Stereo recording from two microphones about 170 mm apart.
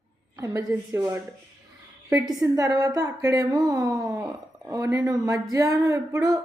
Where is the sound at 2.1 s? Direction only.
20° right (ahead or behind).